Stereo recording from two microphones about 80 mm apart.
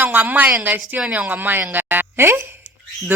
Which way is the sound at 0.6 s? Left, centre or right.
Right.